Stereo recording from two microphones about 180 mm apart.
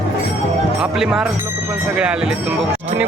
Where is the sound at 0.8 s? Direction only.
5° right (ahead or behind).